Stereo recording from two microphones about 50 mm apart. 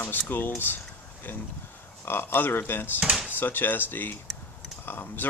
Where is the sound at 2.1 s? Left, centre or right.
Left.